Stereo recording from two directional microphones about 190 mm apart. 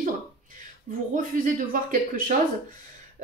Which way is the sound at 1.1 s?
45° right (ahead or behind).